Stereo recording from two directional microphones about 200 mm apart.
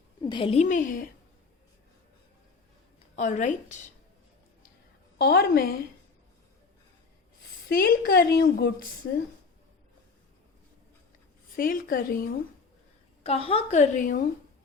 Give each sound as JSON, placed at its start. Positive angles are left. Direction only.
{"t": 0.2, "sound": "a woman's voice", "side_deg": 25}
{"t": 3.2, "sound": "a woman's voice", "side_deg": 40}
{"t": 5.1, "sound": "speech", "side_deg": 50}
{"t": 7.7, "sound": "speech", "side_deg": 50}
{"t": 11.5, "sound": "speech", "side_deg": 45}
{"t": 13.2, "sound": "a woman's voice", "side_deg": 30}